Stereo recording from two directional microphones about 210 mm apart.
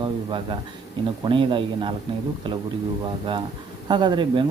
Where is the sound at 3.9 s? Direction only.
20° right (ahead or behind).